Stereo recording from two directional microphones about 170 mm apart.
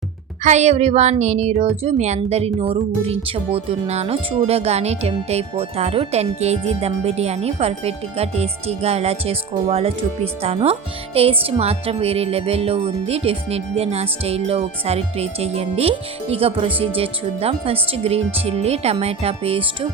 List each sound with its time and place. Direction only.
0.4 s speech: 40° right (ahead or behind)